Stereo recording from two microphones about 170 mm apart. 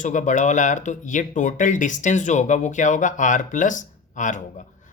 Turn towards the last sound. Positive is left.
turn(degrees=50)  # may be behind; listen again after turning